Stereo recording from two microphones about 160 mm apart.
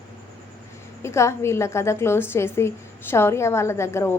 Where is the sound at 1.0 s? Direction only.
15° left (ahead or behind).